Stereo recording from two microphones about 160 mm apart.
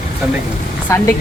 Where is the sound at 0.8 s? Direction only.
15° left (ahead or behind).